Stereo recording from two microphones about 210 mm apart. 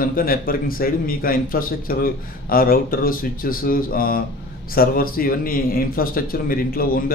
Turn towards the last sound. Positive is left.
turn(degrees=45)  # may be behind; listen again after turning